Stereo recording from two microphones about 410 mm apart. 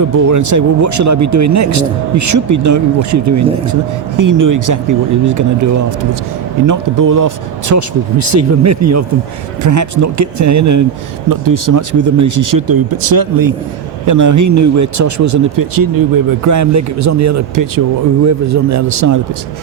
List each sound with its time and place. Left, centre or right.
0.1 s a man's voice: right